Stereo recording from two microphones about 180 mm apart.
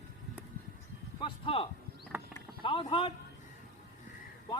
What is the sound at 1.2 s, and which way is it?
Speech, 30° left (ahead or behind).